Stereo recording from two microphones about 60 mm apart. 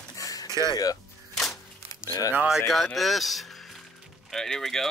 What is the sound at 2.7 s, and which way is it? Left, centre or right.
Speech, centre.